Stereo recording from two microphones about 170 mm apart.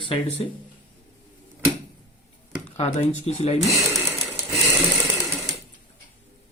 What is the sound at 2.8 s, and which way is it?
Speech, 40° left (ahead or behind).